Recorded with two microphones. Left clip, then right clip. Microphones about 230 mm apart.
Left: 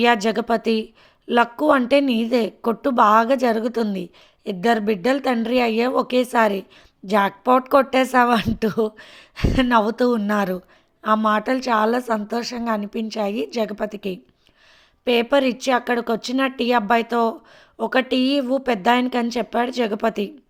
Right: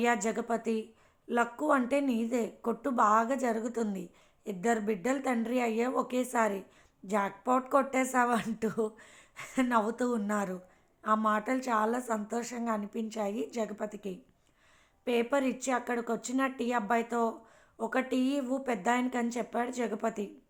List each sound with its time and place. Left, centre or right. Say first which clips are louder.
0.0 s a woman's voice: left 12 dB; left